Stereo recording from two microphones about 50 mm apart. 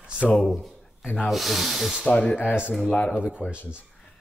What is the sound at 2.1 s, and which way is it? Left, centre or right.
Speech, left.